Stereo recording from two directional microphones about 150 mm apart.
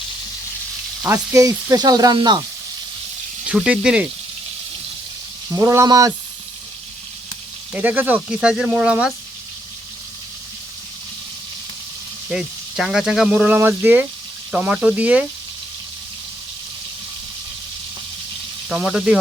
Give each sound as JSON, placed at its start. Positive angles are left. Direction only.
{"t": 1.0, "sound": "speech", "side_deg": -20}
{"t": 3.5, "sound": "speech", "side_deg": -5}
{"t": 5.5, "sound": "speech", "side_deg": -20}
{"t": 7.7, "sound": "speech", "side_deg": -10}
{"t": 12.3, "sound": "speech", "side_deg": -5}
{"t": 18.7, "sound": "speech", "side_deg": 0}